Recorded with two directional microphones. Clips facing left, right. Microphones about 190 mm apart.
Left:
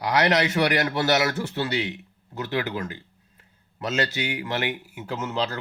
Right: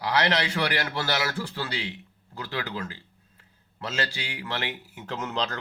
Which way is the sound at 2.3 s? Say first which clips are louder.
Left 5 dB; 20° left (ahead or behind).